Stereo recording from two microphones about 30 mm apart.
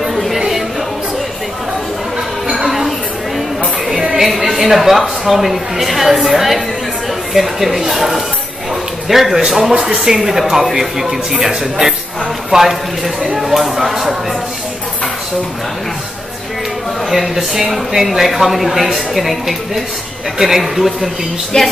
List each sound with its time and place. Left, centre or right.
2.5 s a sound: centre
4.2 s a woman's voice: centre
9.6 s a woman's voice: centre
12.4 s a woman's voice: centre
17.1 s a woman's voice: centre
21.5 s speech: left